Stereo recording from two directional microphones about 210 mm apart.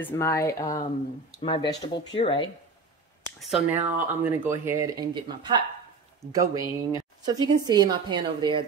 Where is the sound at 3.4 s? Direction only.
5° right (ahead or behind); by 5.5 s 20° right (ahead or behind).